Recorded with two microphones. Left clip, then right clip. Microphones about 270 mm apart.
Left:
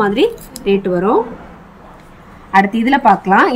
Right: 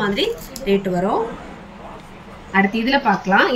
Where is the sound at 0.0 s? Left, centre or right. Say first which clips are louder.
Left 6 dB; centre.